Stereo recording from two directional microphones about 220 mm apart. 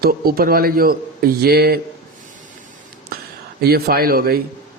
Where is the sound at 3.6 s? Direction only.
45° right (ahead or behind).